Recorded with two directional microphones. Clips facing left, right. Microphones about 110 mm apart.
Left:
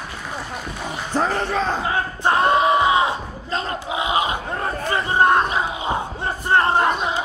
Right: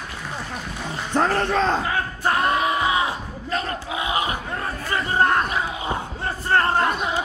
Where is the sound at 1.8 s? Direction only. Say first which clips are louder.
Left 3 dB; 25° left (ahead or behind).